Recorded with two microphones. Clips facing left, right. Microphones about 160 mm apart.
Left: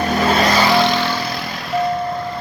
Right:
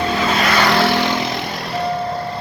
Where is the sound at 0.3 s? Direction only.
35° left (ahead or behind).